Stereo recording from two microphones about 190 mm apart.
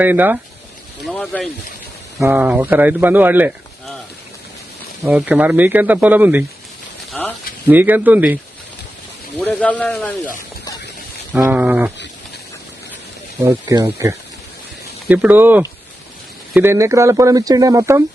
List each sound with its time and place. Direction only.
0.0 s speech: 10° right (ahead or behind)
1.0 s a sound: 5° left (ahead or behind)
2.2 s speech: 10° right (ahead or behind)
5.0 s speech: 5° right (ahead or behind)
7.1 s a sound: 10° left (ahead or behind)
7.7 s speech: 10° right (ahead or behind)
9.4 s a man's voice: 10° left (ahead or behind)
11.3 s a sound: 5° right (ahead or behind)
13.4 s speech: 15° right (ahead or behind)